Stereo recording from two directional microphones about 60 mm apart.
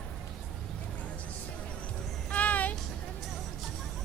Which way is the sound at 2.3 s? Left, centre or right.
Left.